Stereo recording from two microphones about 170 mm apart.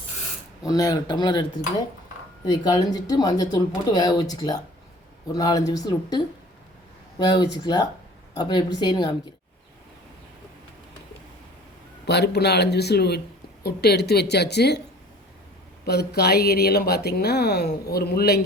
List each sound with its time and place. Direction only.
0.6 s speech: 20° left (ahead or behind)
12.0 s speech: 75° left (ahead or behind)
15.9 s speech: 70° left (ahead or behind)